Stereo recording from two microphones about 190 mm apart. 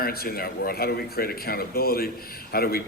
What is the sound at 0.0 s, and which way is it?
A man's voice, 50° left (ahead or behind).